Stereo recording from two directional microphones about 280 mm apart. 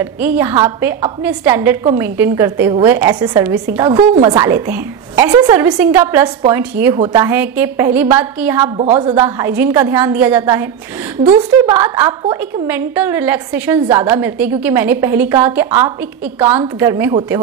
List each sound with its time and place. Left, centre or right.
0.0 s a woman's voice: centre
8.7 s a woman's voice: right